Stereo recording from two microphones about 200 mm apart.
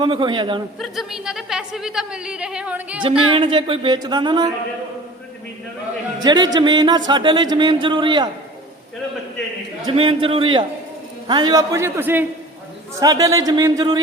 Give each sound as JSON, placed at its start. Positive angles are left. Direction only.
{"t": 0.0, "sound": "speech", "side_deg": -25}
{"t": 0.8, "sound": "a woman's voice", "side_deg": 0}
{"t": 3.0, "sound": "speech", "side_deg": -25}
{"t": 6.1, "sound": "speech", "side_deg": -20}
{"t": 9.8, "sound": "speech", "side_deg": -25}